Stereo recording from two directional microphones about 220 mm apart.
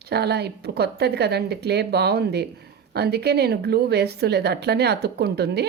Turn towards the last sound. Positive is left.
turn(degrees=-50)  # may be behind; listen again after turning